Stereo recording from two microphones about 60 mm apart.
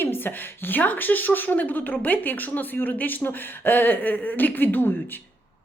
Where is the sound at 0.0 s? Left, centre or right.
Left.